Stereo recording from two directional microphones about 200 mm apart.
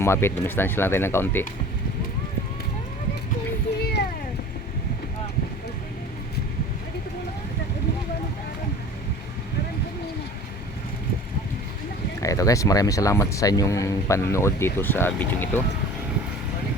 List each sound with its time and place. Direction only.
0.0 s a man's voice: 10° left (ahead or behind)
12.2 s a man's voice: 15° left (ahead or behind)